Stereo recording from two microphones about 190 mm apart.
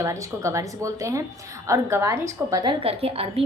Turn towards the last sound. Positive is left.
turn(degrees=-30)  # may be behind; listen again after turning